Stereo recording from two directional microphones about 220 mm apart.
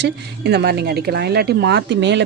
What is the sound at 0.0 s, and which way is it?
Speech, 50° right (ahead or behind).